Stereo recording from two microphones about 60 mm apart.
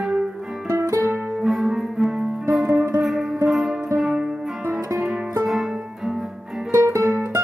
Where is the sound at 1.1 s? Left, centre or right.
Centre.